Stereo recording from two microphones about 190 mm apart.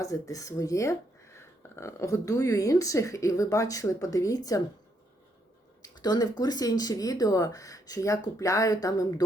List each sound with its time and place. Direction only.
0.0 s speech: 15° left (ahead or behind)
5.8 s a sound: 20° left (ahead or behind)
6.4 s speech: 20° left (ahead or behind)